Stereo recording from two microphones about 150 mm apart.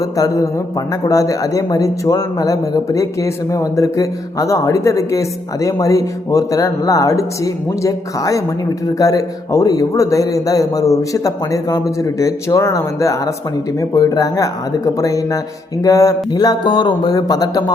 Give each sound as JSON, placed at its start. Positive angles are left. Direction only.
{"t": 1.0, "sound": "a man's voice", "side_deg": 25}